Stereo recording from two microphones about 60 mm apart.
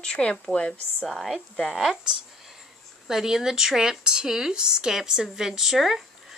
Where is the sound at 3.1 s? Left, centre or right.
Centre.